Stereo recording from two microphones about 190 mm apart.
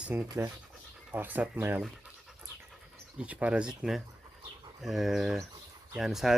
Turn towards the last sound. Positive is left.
turn(degrees=0)  # may be behind; listen again after turning